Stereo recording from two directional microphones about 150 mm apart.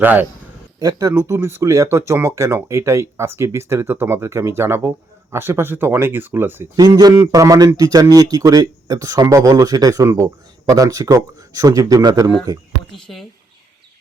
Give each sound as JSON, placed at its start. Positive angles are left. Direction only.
{"t": 0.0, "sound": "speech", "side_deg": -10}
{"t": 0.8, "sound": "a man's voice", "side_deg": -25}
{"t": 6.7, "sound": "a man's voice", "side_deg": -25}